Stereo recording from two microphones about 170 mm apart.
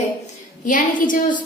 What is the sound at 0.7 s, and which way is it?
Speech, 50° left (ahead or behind).